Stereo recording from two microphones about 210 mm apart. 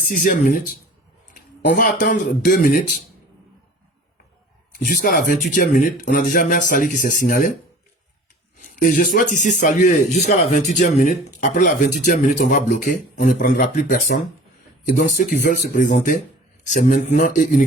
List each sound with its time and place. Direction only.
0.0 s speech: 45° left (ahead or behind)
4.7 s speech: 40° left (ahead or behind)
8.6 s speech: 40° left (ahead or behind)